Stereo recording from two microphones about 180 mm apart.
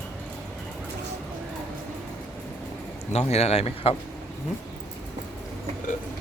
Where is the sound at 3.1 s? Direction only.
35° left (ahead or behind).